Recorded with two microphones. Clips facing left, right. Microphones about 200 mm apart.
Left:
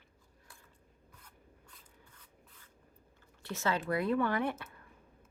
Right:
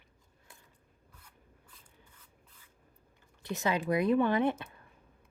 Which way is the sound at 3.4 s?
15° right (ahead or behind).